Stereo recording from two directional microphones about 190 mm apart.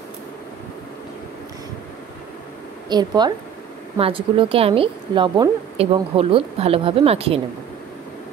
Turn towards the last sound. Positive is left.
turn(degrees=-30)  # may be behind; listen again after turning